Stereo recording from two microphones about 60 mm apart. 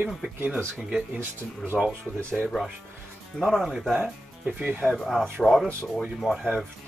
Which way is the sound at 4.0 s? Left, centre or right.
Centre.